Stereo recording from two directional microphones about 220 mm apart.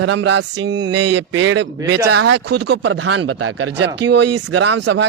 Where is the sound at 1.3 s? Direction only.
65° right (ahead or behind).